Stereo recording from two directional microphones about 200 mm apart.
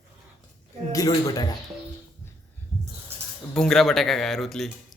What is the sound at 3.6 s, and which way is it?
Speech, centre (ahead or behind).